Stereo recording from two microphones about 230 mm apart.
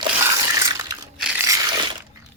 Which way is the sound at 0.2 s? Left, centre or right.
Centre.